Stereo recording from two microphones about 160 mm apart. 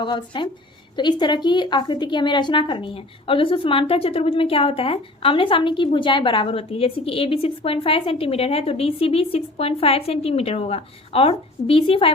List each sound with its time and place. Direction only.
0.0 s a woman's voice: 30° left (ahead or behind)